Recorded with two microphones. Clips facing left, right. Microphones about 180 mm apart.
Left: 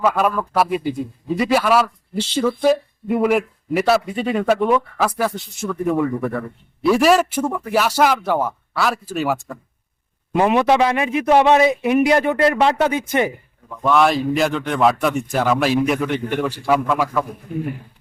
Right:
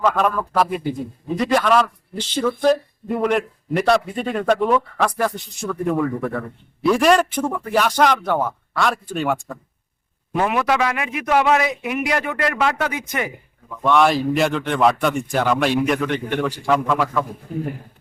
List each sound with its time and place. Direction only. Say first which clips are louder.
0.0 s speech: left 1 dB; 10° left (ahead or behind)
10.3 s a man's voice: left 4 dB; 25° left (ahead or behind)
13.8 s speech: even; centre (ahead or behind)